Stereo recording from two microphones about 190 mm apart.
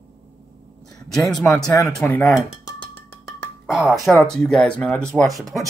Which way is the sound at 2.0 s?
10° left (ahead or behind).